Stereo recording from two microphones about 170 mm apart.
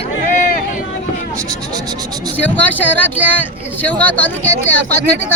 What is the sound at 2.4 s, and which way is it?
A man's voice, 10° left (ahead or behind).